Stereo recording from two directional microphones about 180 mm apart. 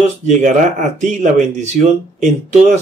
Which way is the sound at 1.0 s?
45° right (ahead or behind).